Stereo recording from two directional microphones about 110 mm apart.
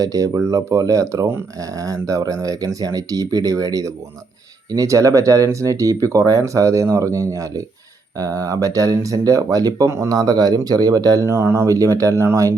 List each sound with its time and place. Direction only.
0.0 s speech: 30° right (ahead or behind)